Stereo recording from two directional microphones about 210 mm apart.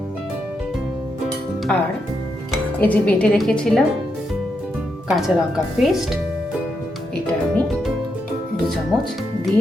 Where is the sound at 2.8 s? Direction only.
5° left (ahead or behind).